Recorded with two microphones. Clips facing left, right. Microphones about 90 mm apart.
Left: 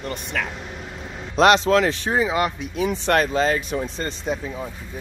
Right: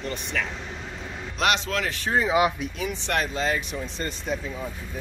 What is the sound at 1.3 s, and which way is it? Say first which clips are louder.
Speech: left 10 dB; 35° left (ahead or behind).